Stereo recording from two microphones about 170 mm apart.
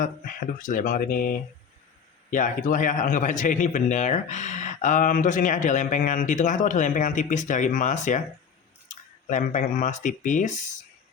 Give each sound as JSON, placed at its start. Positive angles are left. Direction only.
{"t": 0.0, "sound": "a man's voice", "side_deg": 55}
{"t": 9.3, "sound": "a man's voice", "side_deg": 50}